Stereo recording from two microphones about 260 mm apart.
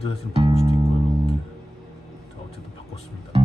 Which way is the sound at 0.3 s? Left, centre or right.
Right.